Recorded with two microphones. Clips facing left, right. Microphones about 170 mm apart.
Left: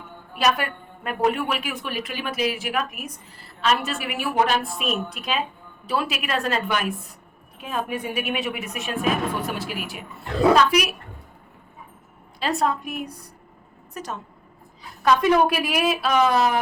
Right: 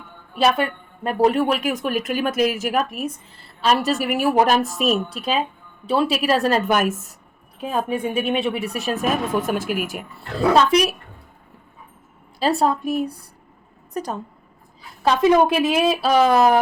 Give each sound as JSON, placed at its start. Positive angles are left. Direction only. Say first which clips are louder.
{"t": 0.3, "sound": "a woman's voice", "louder": "right 4 dB", "side_deg": -25}
{"t": 7.6, "sound": "a woman's voice", "louder": "right 5 dB", "side_deg": -35}
{"t": 10.5, "sound": "a woman's voice", "louder": "right 5 dB", "side_deg": -30}
{"t": 12.4, "sound": "a woman's voice", "louder": "right 4 dB", "side_deg": -35}
{"t": 15.0, "sound": "a woman's voice", "louder": "right 2 dB", "side_deg": -25}